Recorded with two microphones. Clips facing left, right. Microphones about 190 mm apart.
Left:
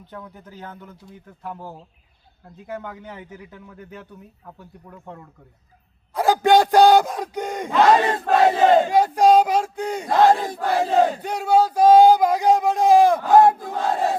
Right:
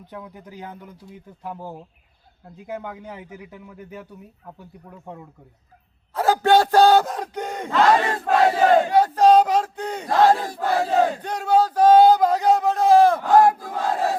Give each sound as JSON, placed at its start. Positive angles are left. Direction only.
{"t": 0.1, "sound": "a man's voice", "side_deg": -10}
{"t": 6.1, "sound": "speech", "side_deg": 10}
{"t": 8.4, "sound": "battle cry", "side_deg": 15}
{"t": 10.1, "sound": "battle cry", "side_deg": 20}
{"t": 11.2, "sound": "a sound", "side_deg": 10}
{"t": 13.5, "sound": "battle cry", "side_deg": 25}